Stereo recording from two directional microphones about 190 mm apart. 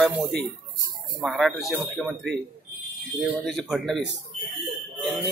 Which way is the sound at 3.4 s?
Centre (ahead or behind).